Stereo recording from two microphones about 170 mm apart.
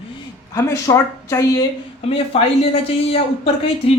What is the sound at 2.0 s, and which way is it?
Speech, 35° left (ahead or behind).